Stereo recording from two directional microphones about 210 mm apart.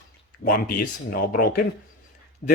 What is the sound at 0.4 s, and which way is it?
Speech, 40° left (ahead or behind).